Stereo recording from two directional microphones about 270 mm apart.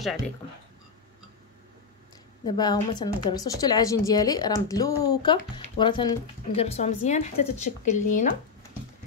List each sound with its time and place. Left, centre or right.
2.4 s speech: centre